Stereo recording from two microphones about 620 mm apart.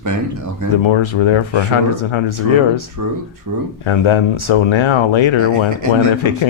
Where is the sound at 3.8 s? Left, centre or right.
Left.